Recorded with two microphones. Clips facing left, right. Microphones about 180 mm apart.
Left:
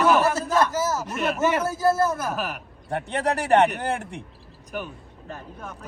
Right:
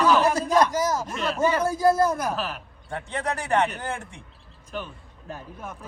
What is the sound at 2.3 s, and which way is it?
Speech, 15° left (ahead or behind).